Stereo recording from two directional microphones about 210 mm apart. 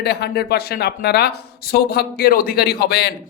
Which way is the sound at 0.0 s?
50° left (ahead or behind).